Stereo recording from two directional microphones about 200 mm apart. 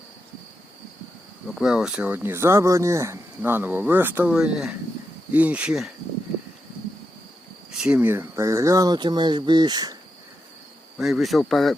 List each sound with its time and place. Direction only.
1.5 s speech: centre (ahead or behind)
7.7 s speech: 5° right (ahead or behind); by 10.0 s 20° right (ahead or behind)
10.9 s speech: centre (ahead or behind)